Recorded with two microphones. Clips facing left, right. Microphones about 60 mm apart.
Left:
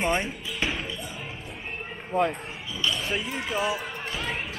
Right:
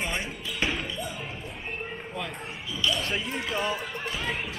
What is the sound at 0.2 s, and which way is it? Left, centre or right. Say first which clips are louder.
Speech: left 1 dB; centre.